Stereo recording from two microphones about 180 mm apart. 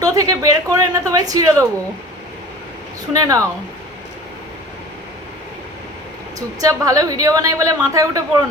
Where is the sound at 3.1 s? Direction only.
20° right (ahead or behind).